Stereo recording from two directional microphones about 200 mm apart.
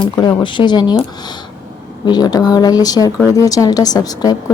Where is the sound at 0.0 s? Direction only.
20° left (ahead or behind).